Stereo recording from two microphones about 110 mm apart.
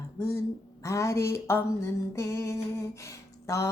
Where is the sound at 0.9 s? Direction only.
30° left (ahead or behind).